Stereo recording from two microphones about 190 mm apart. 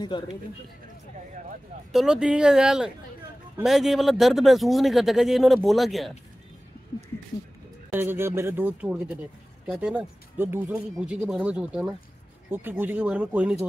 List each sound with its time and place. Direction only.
0.1 s speech: 25° left (ahead or behind)
1.9 s speech: centre (ahead or behind)
7.9 s speech: 10° right (ahead or behind)